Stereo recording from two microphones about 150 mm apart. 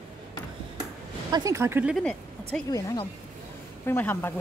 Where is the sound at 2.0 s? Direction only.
5° left (ahead or behind).